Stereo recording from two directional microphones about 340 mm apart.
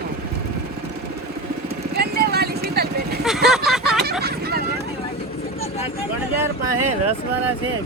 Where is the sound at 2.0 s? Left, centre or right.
Right.